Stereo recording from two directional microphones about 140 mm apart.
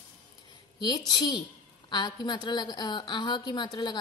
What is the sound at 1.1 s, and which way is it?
A woman's voice, 30° left (ahead or behind).